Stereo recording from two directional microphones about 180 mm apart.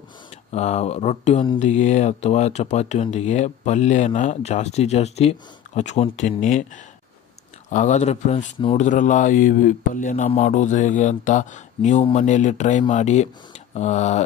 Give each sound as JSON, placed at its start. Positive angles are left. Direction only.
{"t": 0.5, "sound": "speech", "side_deg": 40}
{"t": 7.7, "sound": "speech", "side_deg": 40}
{"t": 8.5, "sound": "speech", "side_deg": 30}
{"t": 8.8, "sound": "speech", "side_deg": 45}